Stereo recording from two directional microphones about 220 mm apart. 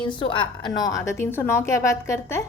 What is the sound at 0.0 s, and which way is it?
A woman's voice, 20° left (ahead or behind).